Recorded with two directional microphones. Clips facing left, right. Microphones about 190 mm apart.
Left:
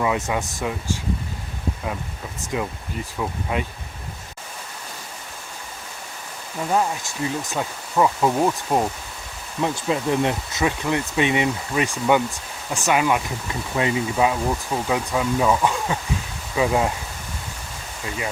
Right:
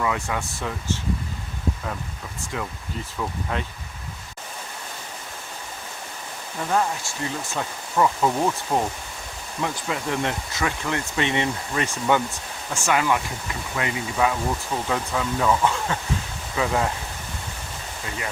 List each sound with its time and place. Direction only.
0.0 s speech: 20° left (ahead or behind)
3.2 s speech: 15° left (ahead or behind)
6.7 s speech: 15° left (ahead or behind)